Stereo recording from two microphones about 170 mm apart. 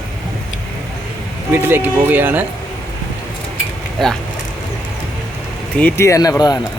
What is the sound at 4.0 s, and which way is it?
Speech, centre (ahead or behind).